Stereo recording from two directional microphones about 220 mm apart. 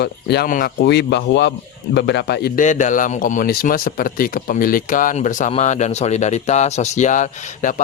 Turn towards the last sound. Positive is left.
turn(degrees=35)  # may be behind; listen again after turning